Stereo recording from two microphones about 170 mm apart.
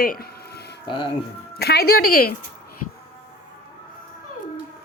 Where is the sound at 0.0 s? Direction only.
60° left (ahead or behind); by 0.8 s 75° left (ahead or behind).